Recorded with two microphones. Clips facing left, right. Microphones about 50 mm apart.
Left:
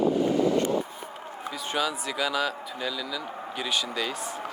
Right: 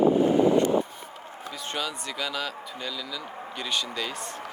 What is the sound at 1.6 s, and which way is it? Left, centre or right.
Speech, centre.